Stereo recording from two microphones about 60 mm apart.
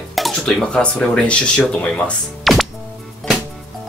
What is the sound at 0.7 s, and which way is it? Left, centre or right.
Speech, centre.